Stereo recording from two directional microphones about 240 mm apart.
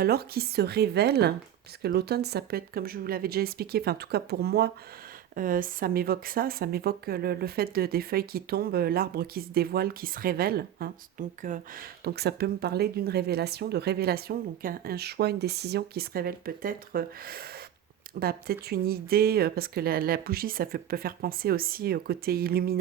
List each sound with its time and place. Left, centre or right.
0.0 s speech: right